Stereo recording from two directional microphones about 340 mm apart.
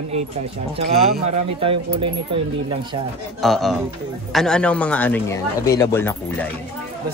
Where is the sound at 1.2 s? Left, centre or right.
Centre.